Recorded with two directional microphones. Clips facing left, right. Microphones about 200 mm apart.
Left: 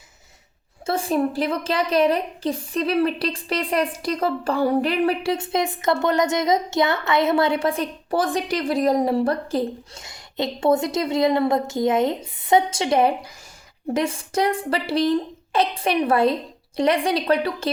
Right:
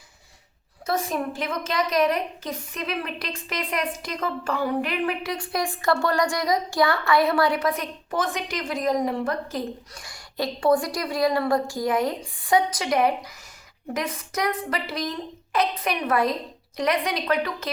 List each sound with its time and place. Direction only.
0.9 s a woman's voice: 30° left (ahead or behind)